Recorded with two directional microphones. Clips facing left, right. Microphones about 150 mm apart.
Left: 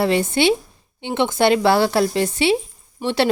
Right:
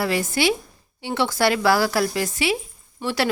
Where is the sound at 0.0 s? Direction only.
25° left (ahead or behind).